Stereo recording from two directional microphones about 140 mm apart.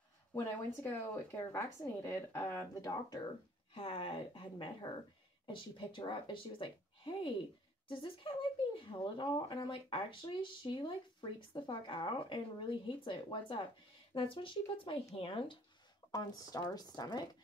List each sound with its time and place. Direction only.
0.3 s a woman's voice: 20° left (ahead or behind)
3.7 s speech: 40° left (ahead or behind)
16.1 s a woman's voice: 30° left (ahead or behind)